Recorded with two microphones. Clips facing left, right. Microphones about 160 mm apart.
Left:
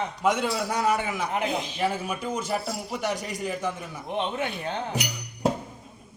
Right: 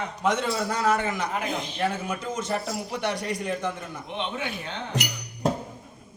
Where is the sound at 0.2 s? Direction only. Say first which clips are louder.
Even; 10° left (ahead or behind).